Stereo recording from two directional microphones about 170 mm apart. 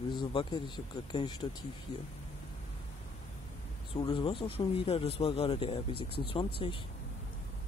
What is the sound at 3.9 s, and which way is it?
Speech, 30° left (ahead or behind).